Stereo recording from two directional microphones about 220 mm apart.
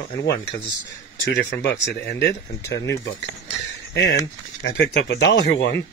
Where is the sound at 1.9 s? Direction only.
50° left (ahead or behind).